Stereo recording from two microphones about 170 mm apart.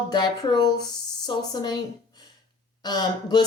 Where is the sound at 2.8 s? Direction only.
25° left (ahead or behind).